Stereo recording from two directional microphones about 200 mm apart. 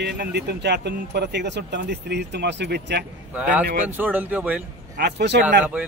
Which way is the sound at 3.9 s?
10° right (ahead or behind).